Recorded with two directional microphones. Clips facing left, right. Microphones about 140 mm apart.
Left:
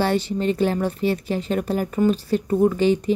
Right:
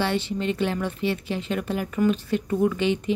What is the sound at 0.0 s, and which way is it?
Speech, 40° left (ahead or behind).